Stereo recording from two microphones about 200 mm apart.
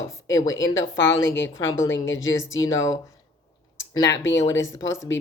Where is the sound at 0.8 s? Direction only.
15° left (ahead or behind).